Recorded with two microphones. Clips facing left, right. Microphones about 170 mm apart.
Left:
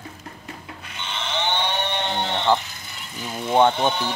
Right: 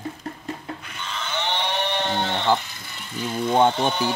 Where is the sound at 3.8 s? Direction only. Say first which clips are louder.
Even; 5° right (ahead or behind).